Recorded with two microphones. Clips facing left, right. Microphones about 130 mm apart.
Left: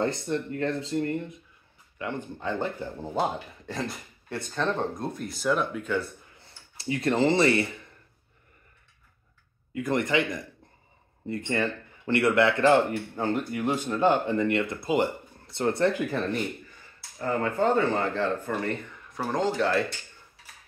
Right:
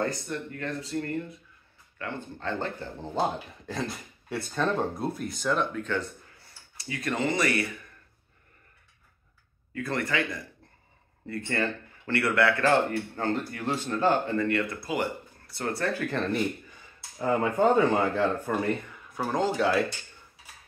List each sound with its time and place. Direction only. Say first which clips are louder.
0.0 s speech: left 3 dB; 25° left (ahead or behind); by 6.0 s 10° left (ahead or behind)
6.3 s speech: left 2 dB; 25° left (ahead or behind)
9.8 s speech: left 4 dB; 20° left (ahead or behind)
16.2 s speech: right 1 dB; centre (ahead or behind)
17.2 s speech: right 2 dB; 15° right (ahead or behind)